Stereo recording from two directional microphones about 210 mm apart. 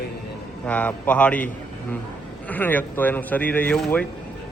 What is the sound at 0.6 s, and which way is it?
A man's voice, 5° left (ahead or behind).